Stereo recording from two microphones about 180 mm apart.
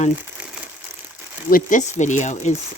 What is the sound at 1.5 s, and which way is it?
Speech, 50° left (ahead or behind).